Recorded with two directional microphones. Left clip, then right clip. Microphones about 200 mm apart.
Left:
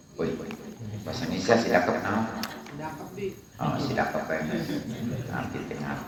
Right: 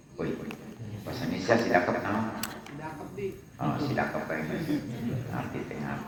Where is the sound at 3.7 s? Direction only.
30° left (ahead or behind).